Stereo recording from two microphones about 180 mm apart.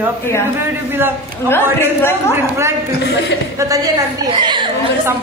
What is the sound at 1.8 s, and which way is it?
Speech, 15° left (ahead or behind).